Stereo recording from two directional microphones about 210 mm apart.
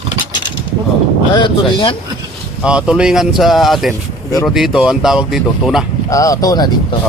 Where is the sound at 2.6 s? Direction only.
5° right (ahead or behind).